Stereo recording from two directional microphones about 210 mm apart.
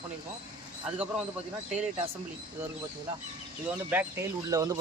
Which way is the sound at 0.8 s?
5° right (ahead or behind).